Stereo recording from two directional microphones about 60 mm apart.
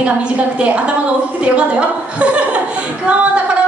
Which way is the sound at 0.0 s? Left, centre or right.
Right.